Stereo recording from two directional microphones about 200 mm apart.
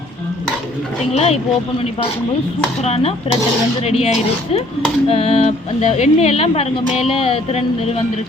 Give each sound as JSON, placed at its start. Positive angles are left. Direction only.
{"t": 1.1, "sound": "speech", "side_deg": 30}
{"t": 2.8, "sound": "speech", "side_deg": 30}